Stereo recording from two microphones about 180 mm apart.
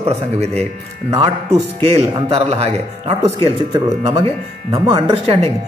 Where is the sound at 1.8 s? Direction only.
35° right (ahead or behind).